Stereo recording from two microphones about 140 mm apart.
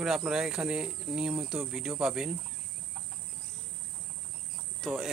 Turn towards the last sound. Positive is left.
turn(degrees=0)  # may be behind; listen again after turning